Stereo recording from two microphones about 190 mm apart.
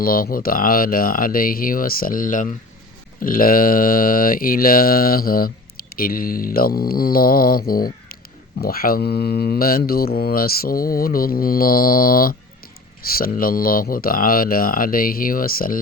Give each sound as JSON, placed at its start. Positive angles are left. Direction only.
{"t": 0.0, "sound": "speech", "side_deg": 50}